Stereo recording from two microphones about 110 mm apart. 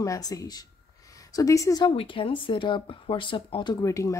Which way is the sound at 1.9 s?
55° left (ahead or behind).